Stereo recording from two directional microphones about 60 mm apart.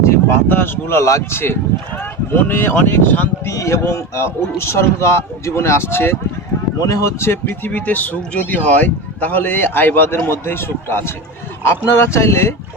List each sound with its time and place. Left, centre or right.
0.0 s a sound: left
0.4 s speech: left
3.4 s speech: left
6.7 s speech: left
7.4 s speech: left